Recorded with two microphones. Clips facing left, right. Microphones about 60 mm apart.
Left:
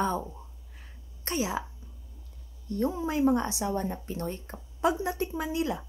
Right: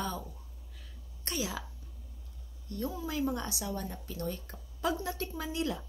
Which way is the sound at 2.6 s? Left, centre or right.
Left.